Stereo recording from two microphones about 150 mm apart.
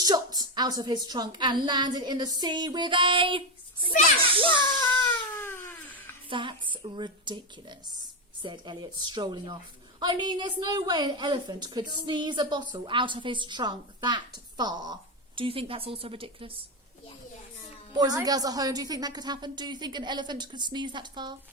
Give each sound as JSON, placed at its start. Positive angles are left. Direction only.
{"t": 0.0, "sound": "a woman's voice", "side_deg": -25}
{"t": 4.9, "sound": "baby cry", "side_deg": 15}
{"t": 6.3, "sound": "a woman's voice", "side_deg": -35}
{"t": 15.4, "sound": "a woman's voice", "side_deg": -40}
{"t": 17.9, "sound": "a woman's voice", "side_deg": -25}